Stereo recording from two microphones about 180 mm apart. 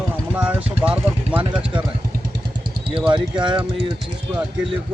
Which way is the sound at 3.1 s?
25° right (ahead or behind).